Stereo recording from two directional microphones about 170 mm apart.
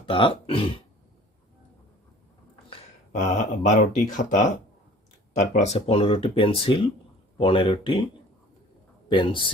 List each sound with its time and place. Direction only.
0.0 s speech: 30° left (ahead or behind)
3.1 s speech: 50° left (ahead or behind); by 8.0 s 30° left (ahead or behind)
9.0 s a man's voice: 30° left (ahead or behind)